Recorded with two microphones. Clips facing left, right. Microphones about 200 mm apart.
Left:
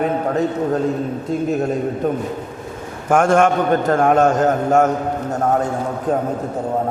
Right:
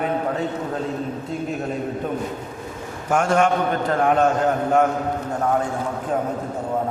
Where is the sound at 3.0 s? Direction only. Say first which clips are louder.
Left 4 dB; 50° left (ahead or behind).